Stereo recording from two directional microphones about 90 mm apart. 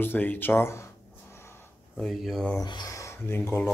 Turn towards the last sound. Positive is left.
turn(degrees=25)  # may be behind; listen again after turning